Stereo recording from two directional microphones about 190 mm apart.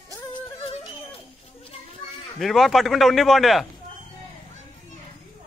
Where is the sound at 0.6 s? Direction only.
30° left (ahead or behind).